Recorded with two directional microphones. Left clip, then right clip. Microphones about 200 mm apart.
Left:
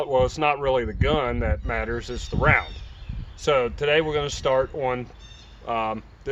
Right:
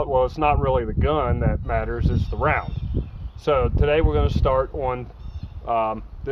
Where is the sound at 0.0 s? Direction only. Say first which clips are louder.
Right 1 dB; 15° right (ahead or behind).